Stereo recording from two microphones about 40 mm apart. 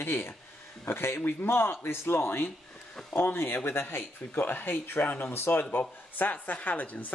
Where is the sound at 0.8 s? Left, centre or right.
Left.